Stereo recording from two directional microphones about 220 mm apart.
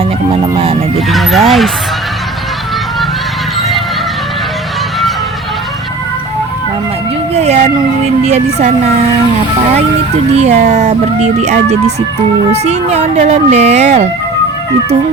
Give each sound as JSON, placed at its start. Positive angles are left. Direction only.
{"t": 0.5, "sound": "speech", "side_deg": -25}
{"t": 1.1, "sound": "speech", "side_deg": 0}
{"t": 7.3, "sound": "a sound", "side_deg": -30}
{"t": 8.2, "sound": "speech", "side_deg": -30}
{"t": 10.3, "sound": "speech", "side_deg": -30}